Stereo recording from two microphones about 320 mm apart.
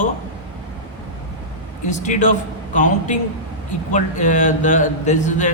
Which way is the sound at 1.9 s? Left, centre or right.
Left.